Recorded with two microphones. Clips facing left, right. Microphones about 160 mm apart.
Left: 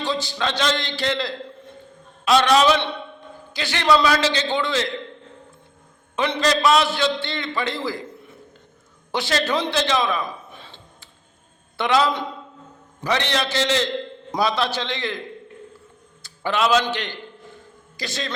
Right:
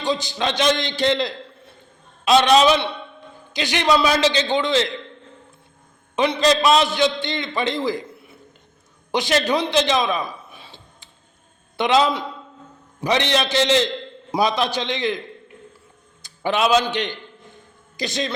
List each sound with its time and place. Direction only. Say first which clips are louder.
0.0 s a man's voice: right 2 dB; 15° right (ahead or behind)
6.1 s a man's voice: right 3 dB; 20° right (ahead or behind)
16.2 s a sound: right 1 dB; 20° right (ahead or behind)
16.8 s a man's voice: right 3 dB; 20° right (ahead or behind)